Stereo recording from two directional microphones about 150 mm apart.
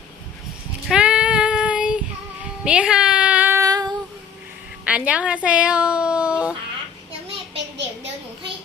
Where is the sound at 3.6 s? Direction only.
25° right (ahead or behind).